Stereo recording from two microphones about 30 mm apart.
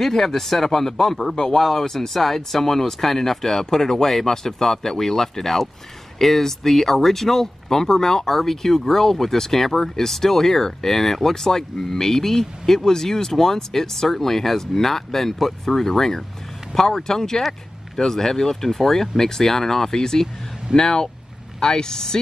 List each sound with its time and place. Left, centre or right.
0.0 s speech: centre
1.6 s speech: centre